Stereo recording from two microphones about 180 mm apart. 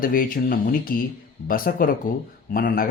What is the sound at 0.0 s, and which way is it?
Speech, 50° left (ahead or behind).